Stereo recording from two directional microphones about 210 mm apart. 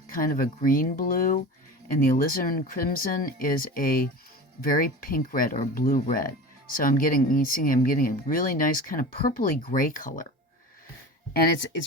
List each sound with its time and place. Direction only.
0.1 s speech: 40° left (ahead or behind)
11.3 s speech: 50° left (ahead or behind)